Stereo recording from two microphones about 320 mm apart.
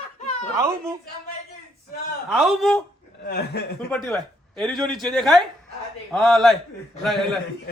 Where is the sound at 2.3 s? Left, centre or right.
Centre.